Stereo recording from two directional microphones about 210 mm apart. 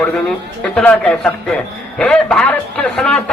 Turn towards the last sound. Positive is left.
turn(degrees=5)  # may be behind; listen again after turning